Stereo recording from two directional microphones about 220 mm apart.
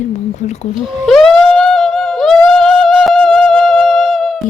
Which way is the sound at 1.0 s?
Centre (ahead or behind).